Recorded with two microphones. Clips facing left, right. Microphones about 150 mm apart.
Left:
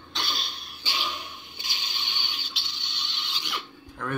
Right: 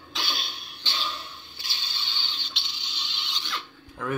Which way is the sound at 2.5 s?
Centre (ahead or behind).